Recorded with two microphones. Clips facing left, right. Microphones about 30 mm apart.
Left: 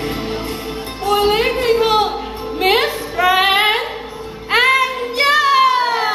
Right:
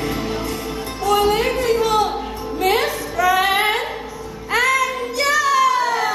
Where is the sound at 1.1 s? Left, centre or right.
Left.